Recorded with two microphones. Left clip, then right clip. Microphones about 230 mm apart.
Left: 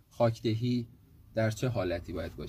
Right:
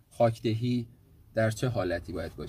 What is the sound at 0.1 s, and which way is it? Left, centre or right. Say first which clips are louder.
Speech: right 3 dB; centre.